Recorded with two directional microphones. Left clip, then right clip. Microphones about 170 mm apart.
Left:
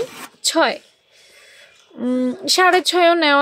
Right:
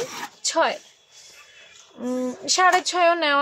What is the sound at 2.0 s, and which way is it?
Speech, 40° left (ahead or behind).